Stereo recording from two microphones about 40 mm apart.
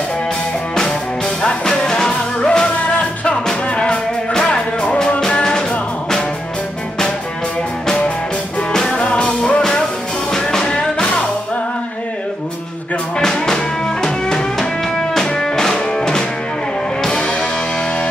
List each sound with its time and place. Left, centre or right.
1.7 s music: centre
8.7 s music: centre
13.2 s music: centre